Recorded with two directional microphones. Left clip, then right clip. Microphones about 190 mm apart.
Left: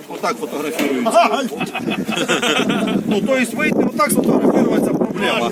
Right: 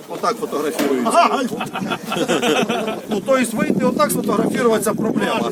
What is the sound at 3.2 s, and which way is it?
Speech, 10° right (ahead or behind).